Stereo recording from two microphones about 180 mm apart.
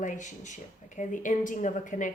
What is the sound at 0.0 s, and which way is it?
A woman's voice, 45° left (ahead or behind).